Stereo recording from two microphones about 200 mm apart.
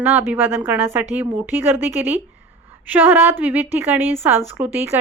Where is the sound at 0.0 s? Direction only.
10° right (ahead or behind).